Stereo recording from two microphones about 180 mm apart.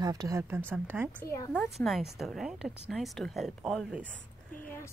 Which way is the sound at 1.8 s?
Centre (ahead or behind).